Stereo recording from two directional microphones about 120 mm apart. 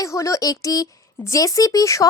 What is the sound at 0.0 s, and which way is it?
Speech, 25° left (ahead or behind).